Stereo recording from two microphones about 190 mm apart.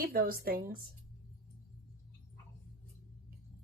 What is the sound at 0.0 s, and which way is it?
Speech, 50° right (ahead or behind).